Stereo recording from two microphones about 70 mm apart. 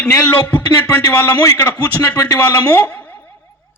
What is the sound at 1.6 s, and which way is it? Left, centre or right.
A man's voice, left.